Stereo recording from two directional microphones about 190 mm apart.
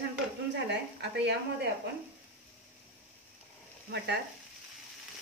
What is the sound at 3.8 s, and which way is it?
Frying, 60° right (ahead or behind).